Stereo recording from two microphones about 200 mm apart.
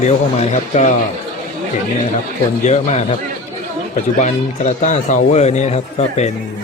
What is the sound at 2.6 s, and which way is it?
Speech, 35° left (ahead or behind).